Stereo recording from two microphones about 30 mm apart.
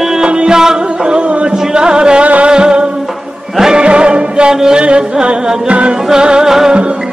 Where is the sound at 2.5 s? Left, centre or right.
Right.